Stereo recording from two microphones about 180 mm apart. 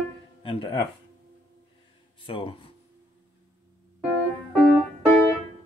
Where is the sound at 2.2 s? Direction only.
30° left (ahead or behind).